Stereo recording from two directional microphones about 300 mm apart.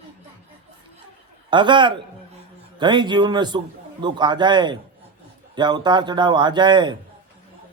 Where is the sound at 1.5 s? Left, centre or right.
Centre.